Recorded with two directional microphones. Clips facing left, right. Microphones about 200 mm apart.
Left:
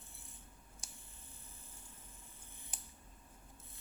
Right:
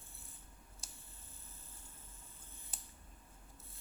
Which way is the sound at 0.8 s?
15° left (ahead or behind).